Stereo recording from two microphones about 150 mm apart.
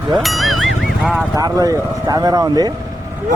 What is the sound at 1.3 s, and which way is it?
Speech, 25° right (ahead or behind).